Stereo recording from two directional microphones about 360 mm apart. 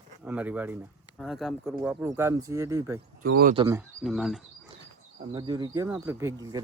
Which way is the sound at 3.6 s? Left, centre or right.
Centre.